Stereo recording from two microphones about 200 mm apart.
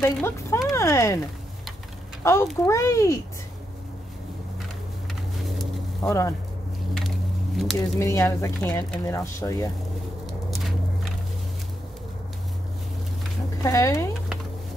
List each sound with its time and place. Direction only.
0.0 s speech: 10° left (ahead or behind)
2.2 s speech: 15° left (ahead or behind)
6.0 s speech: 15° left (ahead or behind)
7.5 s speech: centre (ahead or behind)
8.0 s speech: 15° left (ahead or behind)
13.6 s speech: 15° left (ahead or behind)